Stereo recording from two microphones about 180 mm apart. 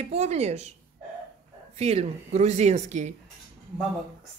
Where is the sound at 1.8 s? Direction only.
35° right (ahead or behind).